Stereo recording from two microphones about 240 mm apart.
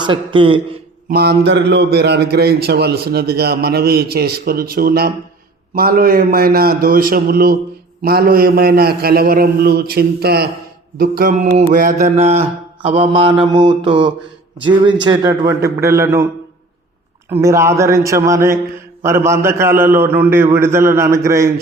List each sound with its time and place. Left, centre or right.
0.0 s mantra: right
1.1 s a man's voice: right
11.7 s mantra: right
15.0 s a man's voice: centre
17.2 s a man's voice: centre